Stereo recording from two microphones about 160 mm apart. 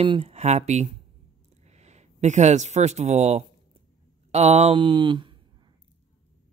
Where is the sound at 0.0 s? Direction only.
35° right (ahead or behind).